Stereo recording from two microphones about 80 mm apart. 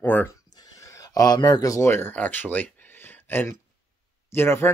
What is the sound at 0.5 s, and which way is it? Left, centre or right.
Neigh, left.